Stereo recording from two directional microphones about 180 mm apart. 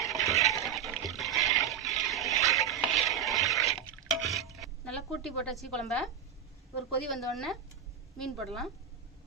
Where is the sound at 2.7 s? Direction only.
Centre (ahead or behind).